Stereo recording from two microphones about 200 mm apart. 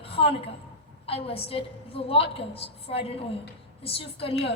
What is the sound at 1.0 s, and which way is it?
A woman's voice, 30° left (ahead or behind).